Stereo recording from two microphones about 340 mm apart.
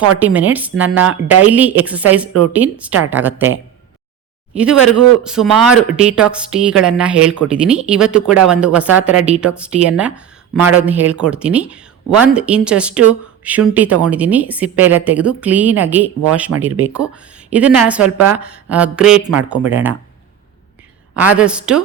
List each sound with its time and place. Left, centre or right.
0.2 s a woman's voice: centre
4.5 s a woman's voice: centre
21.2 s a woman's voice: centre